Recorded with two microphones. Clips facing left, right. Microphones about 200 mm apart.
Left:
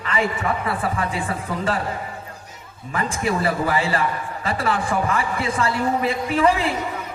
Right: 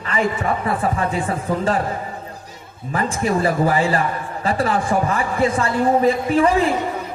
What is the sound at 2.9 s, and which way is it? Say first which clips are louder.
A man's voice: right 3 dB; 35° right (ahead or behind).